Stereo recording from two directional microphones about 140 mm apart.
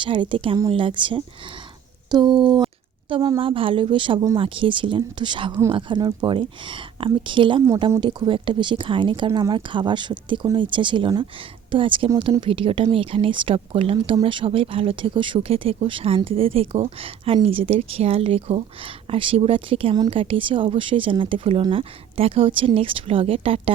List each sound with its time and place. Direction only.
0.0 s speech: 35° right (ahead or behind)